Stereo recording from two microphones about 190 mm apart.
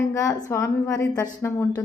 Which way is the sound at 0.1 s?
20° left (ahead or behind).